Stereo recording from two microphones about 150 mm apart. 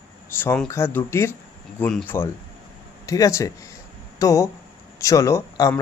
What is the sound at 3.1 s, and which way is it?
Speech, 20° left (ahead or behind).